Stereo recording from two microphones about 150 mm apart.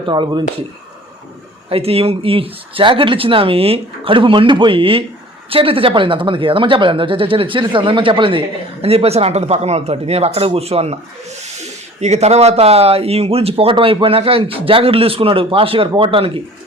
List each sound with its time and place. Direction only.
0.0 s speech: 30° right (ahead or behind)
1.7 s speech: 40° right (ahead or behind)